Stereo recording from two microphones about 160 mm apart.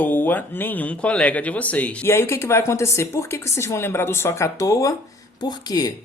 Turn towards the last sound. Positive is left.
turn(degrees=25)  # may be behind; listen again after turning